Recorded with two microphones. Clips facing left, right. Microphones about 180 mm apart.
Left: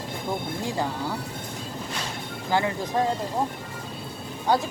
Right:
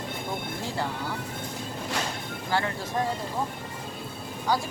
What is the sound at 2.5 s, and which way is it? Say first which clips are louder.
Speech: left 4 dB; 15° left (ahead or behind).